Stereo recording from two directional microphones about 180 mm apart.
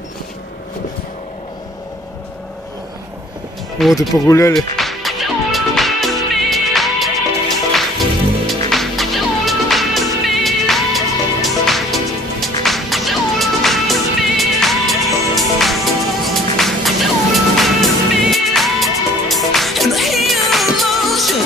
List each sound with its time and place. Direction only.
3.7 s speech: centre (ahead or behind)
4.3 s speech: 15° left (ahead or behind)
4.6 s music: centre (ahead or behind)